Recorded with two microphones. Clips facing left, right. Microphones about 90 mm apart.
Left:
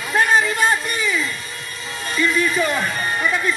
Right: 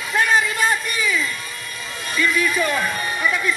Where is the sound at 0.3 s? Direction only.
40° left (ahead or behind).